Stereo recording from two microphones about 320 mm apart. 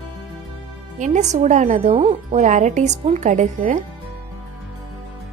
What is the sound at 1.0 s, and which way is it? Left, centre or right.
A woman's voice, right.